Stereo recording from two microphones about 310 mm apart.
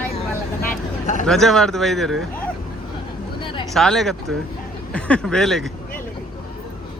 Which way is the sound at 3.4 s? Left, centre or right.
Centre.